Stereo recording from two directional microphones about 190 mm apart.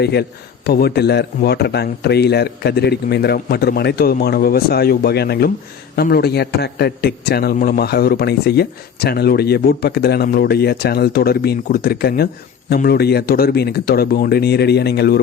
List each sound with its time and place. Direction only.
0.0 s a man's voice: 60° left (ahead or behind)